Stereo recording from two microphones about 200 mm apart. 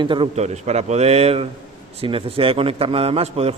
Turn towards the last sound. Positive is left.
turn(degrees=-30)  # may be behind; listen again after turning